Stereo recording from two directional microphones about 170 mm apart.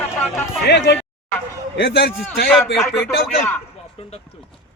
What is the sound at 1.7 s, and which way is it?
Speech, 80° left.